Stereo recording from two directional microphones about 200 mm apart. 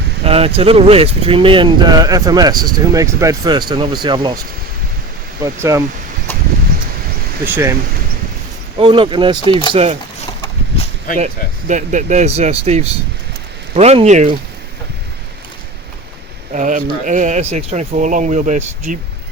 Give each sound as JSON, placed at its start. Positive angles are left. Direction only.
{"t": 0.3, "sound": "speech", "side_deg": -30}
{"t": 5.7, "sound": "speech", "side_deg": -15}
{"t": 6.3, "sound": "a sound", "side_deg": 10}
{"t": 7.4, "sound": "speech", "side_deg": -10}
{"t": 8.8, "sound": "speech", "side_deg": -25}
{"t": 9.4, "sound": "speech", "side_deg": 25}
{"t": 9.7, "sound": "speech", "side_deg": -30}
{"t": 11.1, "sound": "speech", "side_deg": 45}
{"t": 11.7, "sound": "speech", "side_deg": -40}
{"t": 16.5, "sound": "speech", "side_deg": -40}